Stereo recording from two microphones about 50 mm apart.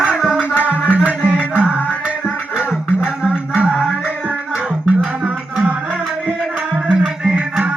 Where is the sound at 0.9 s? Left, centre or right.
Right.